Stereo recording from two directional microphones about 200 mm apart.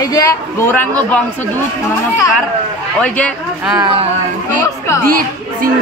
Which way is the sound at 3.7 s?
25° right (ahead or behind).